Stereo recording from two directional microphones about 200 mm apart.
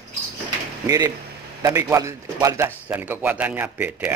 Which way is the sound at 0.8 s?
20° right (ahead or behind).